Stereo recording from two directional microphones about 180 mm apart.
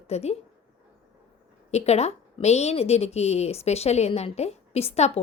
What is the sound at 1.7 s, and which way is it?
A woman's voice, 35° left (ahead or behind).